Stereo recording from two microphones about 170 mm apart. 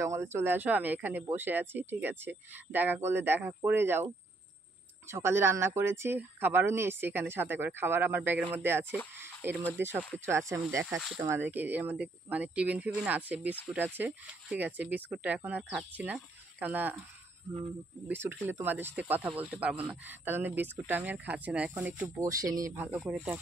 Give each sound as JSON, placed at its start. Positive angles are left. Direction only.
{"t": 0.0, "sound": "speech", "side_deg": -15}
{"t": 9.2, "sound": "a sound", "side_deg": -15}
{"t": 9.8, "sound": "speech", "side_deg": -15}
{"t": 18.0, "sound": "speech", "side_deg": -15}
{"t": 22.2, "sound": "speech", "side_deg": -20}